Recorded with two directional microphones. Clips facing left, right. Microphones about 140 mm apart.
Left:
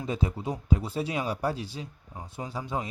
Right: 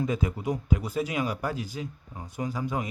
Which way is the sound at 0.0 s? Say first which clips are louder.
Right 2 dB; 30° left (ahead or behind).